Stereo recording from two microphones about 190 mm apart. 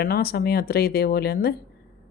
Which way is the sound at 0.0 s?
55° left (ahead or behind).